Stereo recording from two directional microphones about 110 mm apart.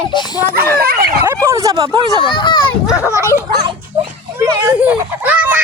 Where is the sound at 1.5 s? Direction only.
30° right (ahead or behind).